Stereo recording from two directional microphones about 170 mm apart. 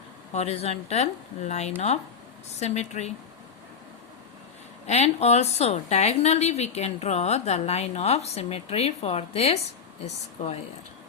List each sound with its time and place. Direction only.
0.3 s a woman's voice: 40° left (ahead or behind)
4.9 s a woman's voice: 40° left (ahead or behind)